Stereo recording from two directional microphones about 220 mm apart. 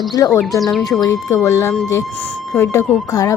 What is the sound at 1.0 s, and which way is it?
Speech, 15° left (ahead or behind).